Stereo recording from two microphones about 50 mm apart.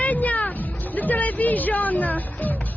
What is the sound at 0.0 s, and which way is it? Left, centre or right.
Music, left.